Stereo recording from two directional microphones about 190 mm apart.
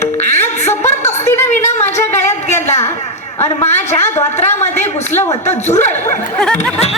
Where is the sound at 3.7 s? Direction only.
10° left (ahead or behind).